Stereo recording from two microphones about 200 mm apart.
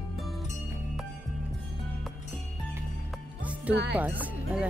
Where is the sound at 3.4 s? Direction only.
5° right (ahead or behind).